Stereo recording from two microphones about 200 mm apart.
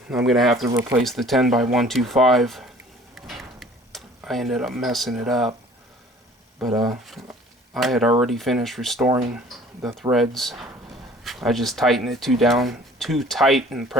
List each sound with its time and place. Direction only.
0.1 s speech: centre (ahead or behind)
0.7 s speech: 15° right (ahead or behind)
1.0 s speech: centre (ahead or behind)
3.2 s tick-tock: centre (ahead or behind)
6.6 s speech: centre (ahead or behind)
9.0 s speech: 10° right (ahead or behind)